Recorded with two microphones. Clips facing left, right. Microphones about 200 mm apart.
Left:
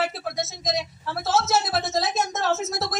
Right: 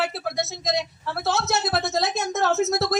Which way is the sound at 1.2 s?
60° right (ahead or behind).